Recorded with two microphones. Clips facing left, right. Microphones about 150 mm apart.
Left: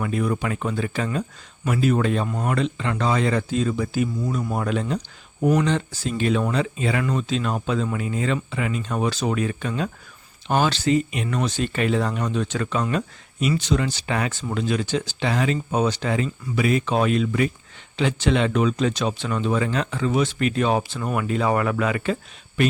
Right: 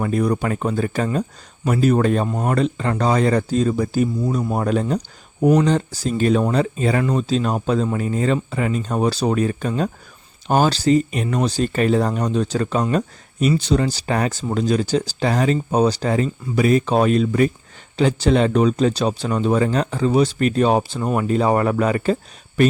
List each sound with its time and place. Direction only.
0.0 s speech: 40° right (ahead or behind)